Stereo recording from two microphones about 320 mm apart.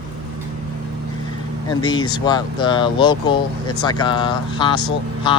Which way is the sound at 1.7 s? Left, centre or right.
Centre.